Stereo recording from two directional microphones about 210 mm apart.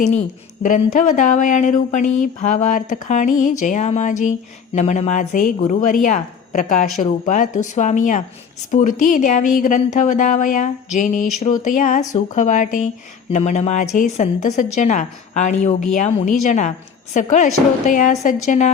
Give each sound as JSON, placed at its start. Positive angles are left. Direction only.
{"t": 0.6, "sound": "speech", "side_deg": 35}